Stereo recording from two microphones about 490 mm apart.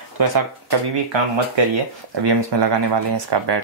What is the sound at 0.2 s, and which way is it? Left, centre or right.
Speech, right.